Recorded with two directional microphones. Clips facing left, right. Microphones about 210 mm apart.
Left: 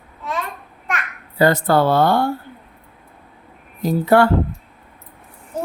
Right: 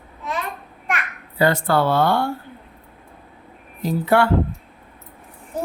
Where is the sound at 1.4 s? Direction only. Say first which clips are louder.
Left 3 dB; 40° left (ahead or behind).